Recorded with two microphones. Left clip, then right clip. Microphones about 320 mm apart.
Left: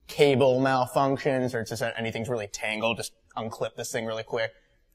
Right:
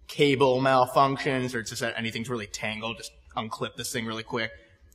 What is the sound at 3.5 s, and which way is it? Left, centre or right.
Speech, left.